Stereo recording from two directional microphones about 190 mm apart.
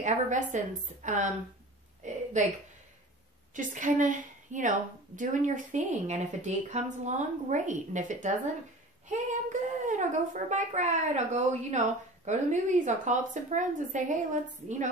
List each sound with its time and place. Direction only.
0.0 s speech: 40° right (ahead or behind)
2.0 s a sound: 40° right (ahead or behind)
3.5 s speech: 45° right (ahead or behind)
9.3 s speech: 40° right (ahead or behind)